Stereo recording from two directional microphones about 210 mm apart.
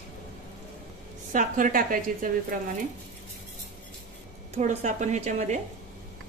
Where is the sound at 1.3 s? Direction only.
40° right (ahead or behind).